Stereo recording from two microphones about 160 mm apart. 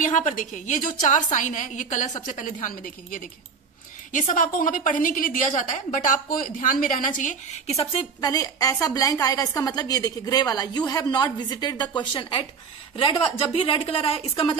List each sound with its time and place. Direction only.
0.0 s a woman's voice: 55° left (ahead or behind); by 8.1 s 35° left (ahead or behind)
8.2 s a woman's voice: 25° left (ahead or behind)